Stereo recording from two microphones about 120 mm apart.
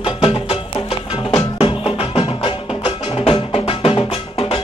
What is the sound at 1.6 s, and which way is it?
Music, 50° left (ahead or behind).